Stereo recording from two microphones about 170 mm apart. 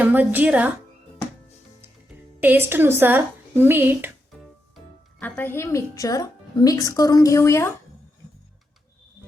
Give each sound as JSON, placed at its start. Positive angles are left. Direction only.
{"t": 0.0, "sound": "a woman's voice", "side_deg": -10}
{"t": 2.4, "sound": "a woman's voice", "side_deg": -10}
{"t": 5.2, "sound": "a woman's voice", "side_deg": 15}